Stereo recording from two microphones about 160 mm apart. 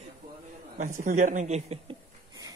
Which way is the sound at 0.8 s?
50° right (ahead or behind).